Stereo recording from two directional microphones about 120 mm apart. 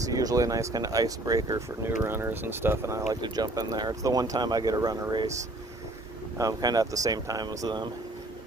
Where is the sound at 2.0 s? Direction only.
20° right (ahead or behind).